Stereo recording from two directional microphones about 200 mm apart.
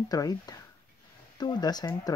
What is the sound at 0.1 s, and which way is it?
Speech, 20° left (ahead or behind).